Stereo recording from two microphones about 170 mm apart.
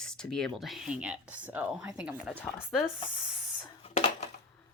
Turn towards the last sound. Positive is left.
turn(degrees=40)  # may be behind; listen again after turning